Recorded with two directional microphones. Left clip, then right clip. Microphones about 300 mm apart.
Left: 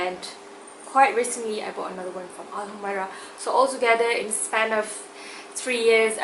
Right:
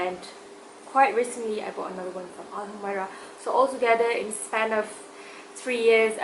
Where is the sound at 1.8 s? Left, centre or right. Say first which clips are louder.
Left 1 dB; centre.